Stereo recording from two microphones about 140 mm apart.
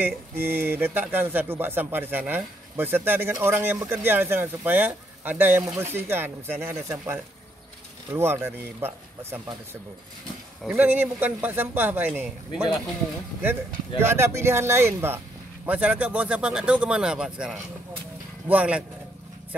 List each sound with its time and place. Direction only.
0.0 s speech: 15° right (ahead or behind)
10.8 s speech: 10° right (ahead or behind)
13.9 s speech: 15° right (ahead or behind)